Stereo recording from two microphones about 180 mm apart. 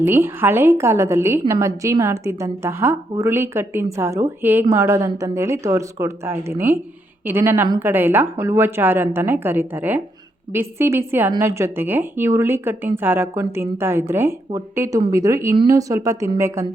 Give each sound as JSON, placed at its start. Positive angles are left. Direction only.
{"t": 0.0, "sound": "a woman's voice", "side_deg": -10}